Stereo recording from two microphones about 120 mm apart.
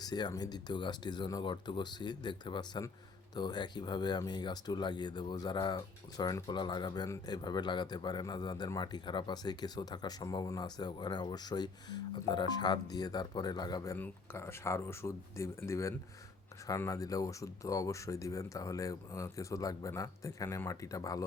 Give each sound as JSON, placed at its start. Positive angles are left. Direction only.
{"t": 0.0, "sound": "speech", "side_deg": 35}
{"t": 14.0, "sound": "speech", "side_deg": 20}